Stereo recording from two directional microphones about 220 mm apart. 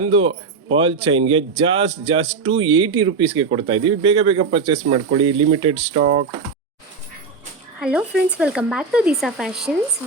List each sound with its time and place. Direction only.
0.0 s speech: 30° right (ahead or behind)
7.8 s speech: 5° right (ahead or behind)